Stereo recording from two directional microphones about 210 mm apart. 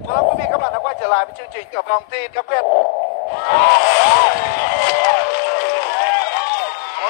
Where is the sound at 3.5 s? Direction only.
50° left (ahead or behind).